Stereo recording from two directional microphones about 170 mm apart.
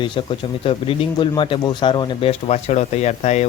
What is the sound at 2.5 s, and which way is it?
Speech, 40° left (ahead or behind).